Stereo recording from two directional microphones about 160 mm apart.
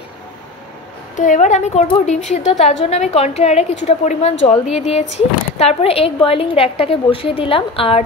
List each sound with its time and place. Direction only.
1.1 s a woman's voice: 50° left (ahead or behind); by 8.0 s 35° left (ahead or behind)